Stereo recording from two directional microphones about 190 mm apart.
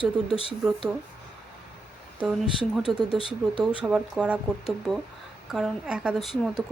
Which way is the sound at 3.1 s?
30° left (ahead or behind).